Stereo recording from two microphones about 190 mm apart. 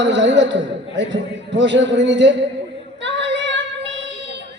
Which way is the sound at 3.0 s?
70° right (ahead or behind).